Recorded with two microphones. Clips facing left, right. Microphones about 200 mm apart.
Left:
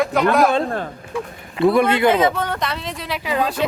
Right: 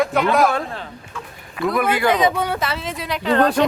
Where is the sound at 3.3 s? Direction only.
70° right (ahead or behind).